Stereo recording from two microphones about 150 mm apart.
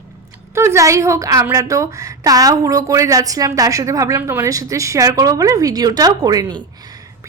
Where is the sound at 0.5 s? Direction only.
20° right (ahead or behind).